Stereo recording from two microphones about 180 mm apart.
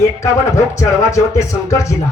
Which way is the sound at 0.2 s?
15° left (ahead or behind).